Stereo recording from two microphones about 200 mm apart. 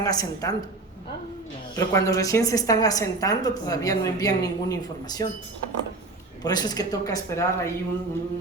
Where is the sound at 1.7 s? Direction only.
15° left (ahead or behind).